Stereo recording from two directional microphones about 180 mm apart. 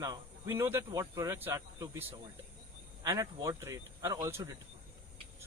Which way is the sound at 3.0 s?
20° right (ahead or behind).